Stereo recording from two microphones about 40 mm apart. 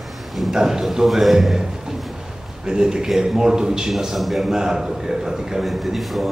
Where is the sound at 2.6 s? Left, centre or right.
Centre.